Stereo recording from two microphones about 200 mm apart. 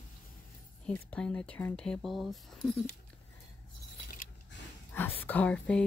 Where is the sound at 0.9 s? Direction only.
5° left (ahead or behind).